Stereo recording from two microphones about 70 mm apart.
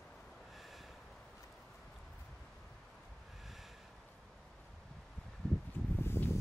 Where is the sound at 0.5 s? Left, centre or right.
Centre.